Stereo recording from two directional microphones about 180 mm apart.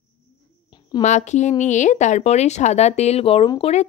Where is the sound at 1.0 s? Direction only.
40° left (ahead or behind).